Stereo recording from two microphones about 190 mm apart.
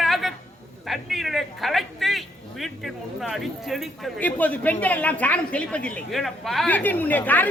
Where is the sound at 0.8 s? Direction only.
Centre (ahead or behind).